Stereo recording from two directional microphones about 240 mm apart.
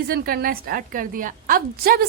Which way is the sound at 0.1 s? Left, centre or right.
Right.